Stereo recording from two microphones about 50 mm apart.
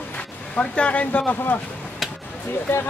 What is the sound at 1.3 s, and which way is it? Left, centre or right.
Speech, left.